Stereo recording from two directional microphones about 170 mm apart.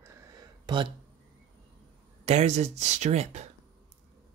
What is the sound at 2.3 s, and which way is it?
Speech, 40° right (ahead or behind).